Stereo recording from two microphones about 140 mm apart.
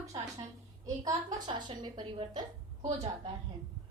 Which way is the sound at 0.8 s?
25° right (ahead or behind).